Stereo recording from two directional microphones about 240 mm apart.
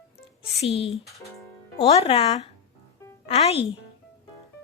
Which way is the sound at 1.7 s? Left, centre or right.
Left.